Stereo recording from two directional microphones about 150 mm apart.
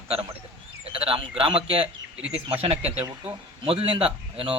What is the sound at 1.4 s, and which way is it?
Speech, 35° right (ahead or behind).